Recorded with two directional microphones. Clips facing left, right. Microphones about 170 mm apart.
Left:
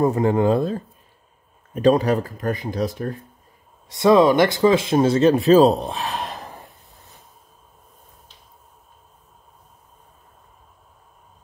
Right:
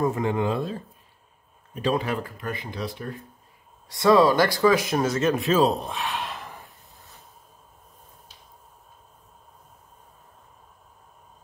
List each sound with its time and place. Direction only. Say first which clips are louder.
0.0 s speech: left 6 dB; 40° left (ahead or behind)
3.9 s speech: left 3 dB; 20° left (ahead or behind); by 6.7 s 40° left (ahead or behind)